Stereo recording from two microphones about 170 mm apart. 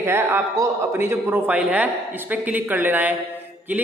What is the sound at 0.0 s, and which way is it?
A man's voice, 15° right (ahead or behind).